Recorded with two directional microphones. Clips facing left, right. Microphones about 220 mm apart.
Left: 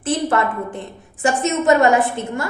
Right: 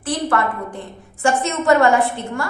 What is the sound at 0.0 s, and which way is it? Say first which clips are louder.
A woman's voice: left 1 dB; 20° left (ahead or behind).